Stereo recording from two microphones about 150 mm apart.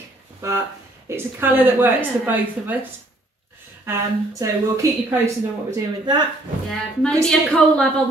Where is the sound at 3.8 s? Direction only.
20° right (ahead or behind).